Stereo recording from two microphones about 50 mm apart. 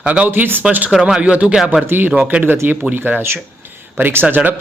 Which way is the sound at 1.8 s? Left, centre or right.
Right.